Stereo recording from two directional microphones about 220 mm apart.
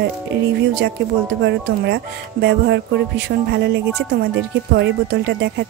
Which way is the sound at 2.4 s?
50° right (ahead or behind).